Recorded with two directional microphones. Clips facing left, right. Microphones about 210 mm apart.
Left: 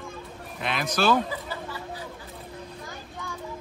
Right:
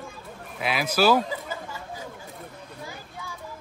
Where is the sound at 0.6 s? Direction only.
5° right (ahead or behind).